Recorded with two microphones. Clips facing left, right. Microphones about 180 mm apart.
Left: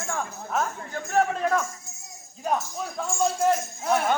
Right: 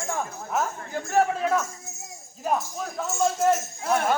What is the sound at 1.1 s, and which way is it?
Speech, 5° right (ahead or behind).